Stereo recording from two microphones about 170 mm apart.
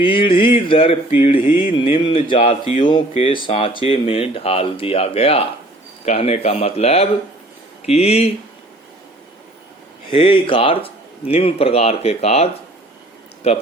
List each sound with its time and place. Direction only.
0.0 s speech: 30° left (ahead or behind)
10.1 s speech: 30° left (ahead or behind)